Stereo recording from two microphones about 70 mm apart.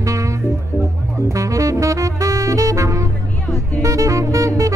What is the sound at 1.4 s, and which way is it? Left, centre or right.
Saxophone, right.